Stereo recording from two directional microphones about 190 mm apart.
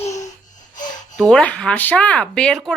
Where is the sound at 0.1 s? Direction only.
40° left (ahead or behind).